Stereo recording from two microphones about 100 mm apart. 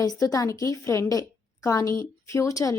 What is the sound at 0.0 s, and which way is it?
A woman's voice, 35° left (ahead or behind).